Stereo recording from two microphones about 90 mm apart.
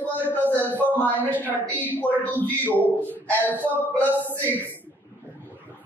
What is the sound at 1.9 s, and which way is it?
Speech, 20° left (ahead or behind).